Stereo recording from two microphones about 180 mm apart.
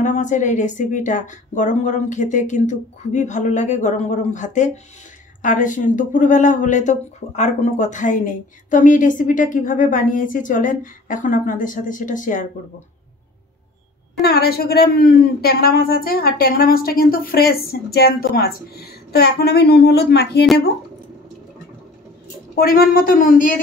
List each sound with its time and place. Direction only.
0.0 s speech: 45° left (ahead or behind)
14.2 s a woman's voice: 60° left (ahead or behind)
22.6 s speech: 55° left (ahead or behind)